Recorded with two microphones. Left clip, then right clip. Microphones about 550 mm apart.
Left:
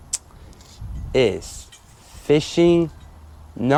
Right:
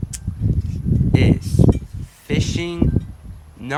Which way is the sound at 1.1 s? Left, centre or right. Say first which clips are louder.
Left 3 dB; left.